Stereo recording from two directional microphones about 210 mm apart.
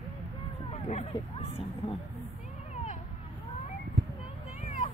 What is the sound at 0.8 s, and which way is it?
Speech, 30° left (ahead or behind).